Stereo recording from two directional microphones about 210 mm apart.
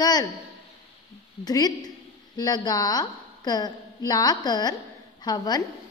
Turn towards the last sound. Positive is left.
turn(degrees=20)  # may be behind; listen again after turning